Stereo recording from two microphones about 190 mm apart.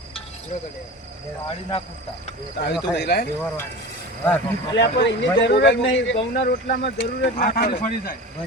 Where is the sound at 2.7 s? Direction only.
60° left (ahead or behind).